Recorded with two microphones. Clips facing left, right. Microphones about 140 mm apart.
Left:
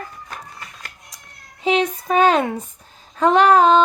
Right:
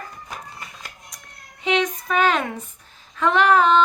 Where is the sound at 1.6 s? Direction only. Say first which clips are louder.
Left 3 dB; 35° left (ahead or behind).